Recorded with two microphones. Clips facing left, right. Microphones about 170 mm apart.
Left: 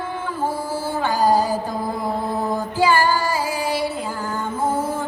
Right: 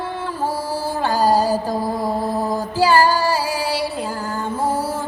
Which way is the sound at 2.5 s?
35° right (ahead or behind).